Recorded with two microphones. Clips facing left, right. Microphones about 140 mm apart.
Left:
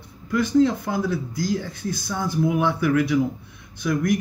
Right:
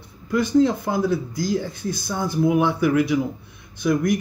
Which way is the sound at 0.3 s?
20° right (ahead or behind).